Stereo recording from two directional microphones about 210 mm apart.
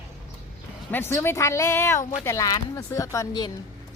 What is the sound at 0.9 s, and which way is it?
Speech, 10° left (ahead or behind).